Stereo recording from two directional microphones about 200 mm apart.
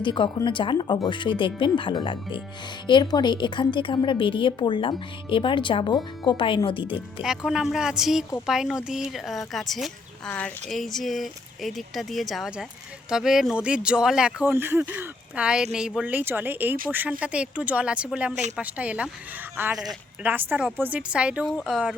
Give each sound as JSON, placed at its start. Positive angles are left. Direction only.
{"t": 0.0, "sound": "a woman's voice", "side_deg": 25}
{"t": 7.2, "sound": "speech", "side_deg": -5}